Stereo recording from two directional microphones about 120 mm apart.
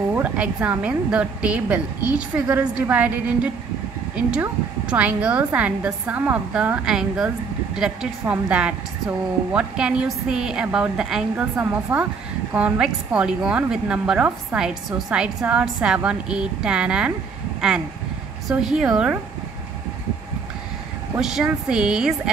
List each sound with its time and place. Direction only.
0.1 s a woman's voice: 10° right (ahead or behind)
11.5 s a woman's voice: 15° right (ahead or behind)
21.2 s speech: 5° right (ahead or behind)